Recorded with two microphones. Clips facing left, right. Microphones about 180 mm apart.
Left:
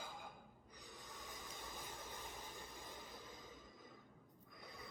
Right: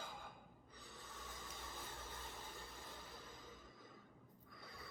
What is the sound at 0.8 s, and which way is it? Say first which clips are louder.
Vehicle: left 1 dB; 15° left (ahead or behind).